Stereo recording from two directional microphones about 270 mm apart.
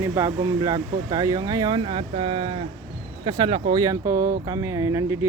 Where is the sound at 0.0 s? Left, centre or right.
Centre.